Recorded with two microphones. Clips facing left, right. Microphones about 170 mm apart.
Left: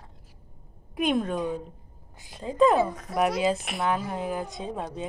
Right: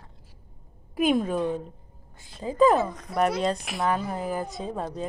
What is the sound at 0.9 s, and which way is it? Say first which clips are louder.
Speech: right 2 dB; centre (ahead or behind).